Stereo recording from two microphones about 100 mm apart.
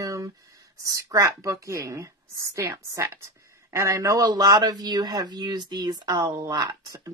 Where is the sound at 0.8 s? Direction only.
35° right (ahead or behind).